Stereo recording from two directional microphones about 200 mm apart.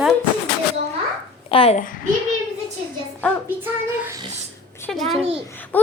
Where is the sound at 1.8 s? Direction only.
45° left (ahead or behind).